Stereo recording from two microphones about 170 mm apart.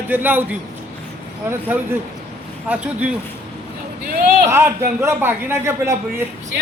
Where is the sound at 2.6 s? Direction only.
10° right (ahead or behind).